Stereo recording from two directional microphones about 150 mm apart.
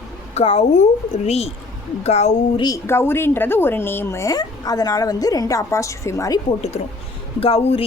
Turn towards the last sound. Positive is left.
turn(degrees=40)  # may be behind; listen again after turning